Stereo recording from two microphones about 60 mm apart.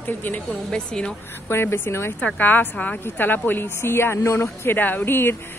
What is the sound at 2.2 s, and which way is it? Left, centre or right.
Speech, left.